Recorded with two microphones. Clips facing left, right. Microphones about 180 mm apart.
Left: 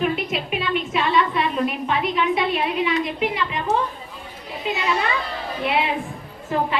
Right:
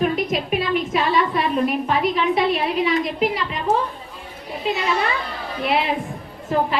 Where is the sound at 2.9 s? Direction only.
40° right (ahead or behind).